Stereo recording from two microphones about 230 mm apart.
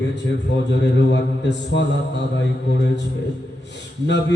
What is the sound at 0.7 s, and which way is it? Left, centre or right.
Mantra, left.